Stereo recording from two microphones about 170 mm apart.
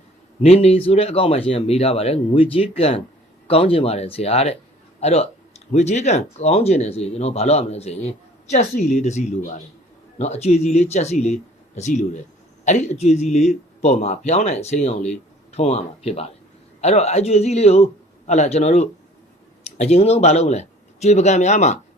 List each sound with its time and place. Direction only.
0.4 s speech: 35° left (ahead or behind)